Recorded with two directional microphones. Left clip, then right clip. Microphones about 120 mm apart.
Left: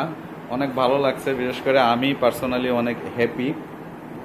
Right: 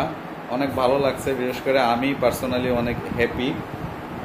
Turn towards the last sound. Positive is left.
turn(degrees=-10)  # may be behind; listen again after turning